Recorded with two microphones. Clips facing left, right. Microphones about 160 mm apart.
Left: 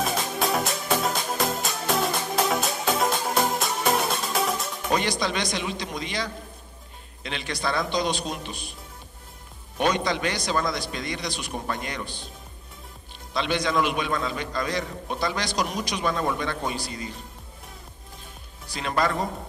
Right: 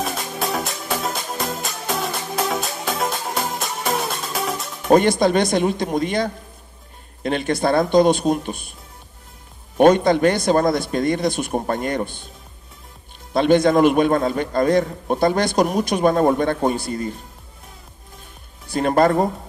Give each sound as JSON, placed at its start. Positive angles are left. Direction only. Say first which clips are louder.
{"t": 0.0, "sound": "music", "louder": "right 1 dB", "side_deg": 0}
{"t": 4.8, "sound": "a man's voice", "louder": "right 11 dB", "side_deg": -50}
{"t": 9.8, "sound": "a man's voice", "louder": "right 11 dB", "side_deg": -50}
{"t": 13.3, "sound": "a man's voice", "louder": "right 11 dB", "side_deg": -50}
{"t": 18.7, "sound": "a man's voice", "louder": "right 9 dB", "side_deg": -50}